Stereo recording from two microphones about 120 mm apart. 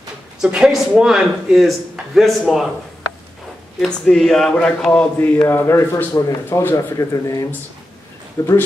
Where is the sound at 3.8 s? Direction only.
5° left (ahead or behind); by 8.5 s 25° left (ahead or behind).